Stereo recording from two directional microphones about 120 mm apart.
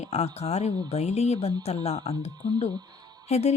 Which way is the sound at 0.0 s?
60° left (ahead or behind).